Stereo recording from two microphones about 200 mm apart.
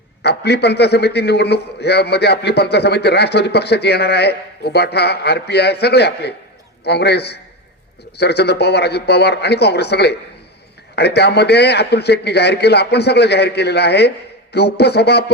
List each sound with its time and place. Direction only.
0.2 s a man's voice: 55° left (ahead or behind)